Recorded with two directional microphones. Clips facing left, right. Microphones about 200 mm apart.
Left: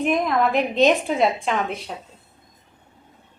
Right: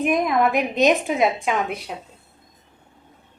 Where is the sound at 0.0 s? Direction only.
10° right (ahead or behind).